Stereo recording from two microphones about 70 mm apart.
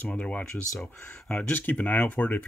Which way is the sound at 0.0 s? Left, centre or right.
Centre.